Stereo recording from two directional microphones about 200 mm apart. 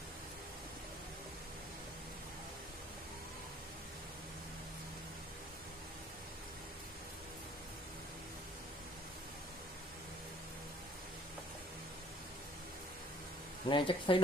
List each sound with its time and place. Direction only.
13.7 s speech: 25° left (ahead or behind)